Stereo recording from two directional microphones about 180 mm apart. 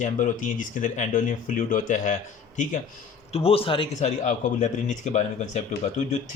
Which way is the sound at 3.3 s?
35° left (ahead or behind).